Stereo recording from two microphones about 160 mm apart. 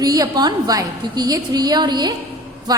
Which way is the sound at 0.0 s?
25° right (ahead or behind).